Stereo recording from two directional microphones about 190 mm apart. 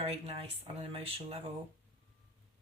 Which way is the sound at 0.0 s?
30° right (ahead or behind).